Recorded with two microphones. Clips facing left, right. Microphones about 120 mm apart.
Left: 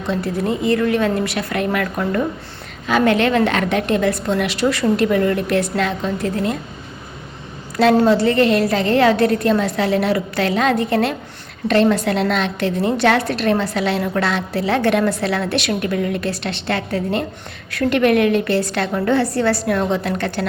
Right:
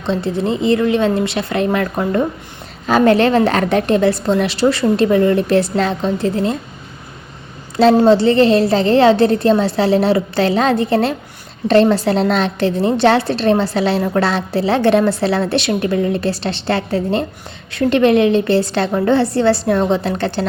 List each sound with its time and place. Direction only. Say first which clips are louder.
0.0 s a woman's voice: right 3 dB; 25° right (ahead or behind)
7.8 s a woman's voice: right 3 dB; 30° right (ahead or behind)